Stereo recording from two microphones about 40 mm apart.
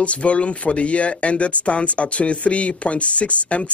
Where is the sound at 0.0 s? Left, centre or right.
Left.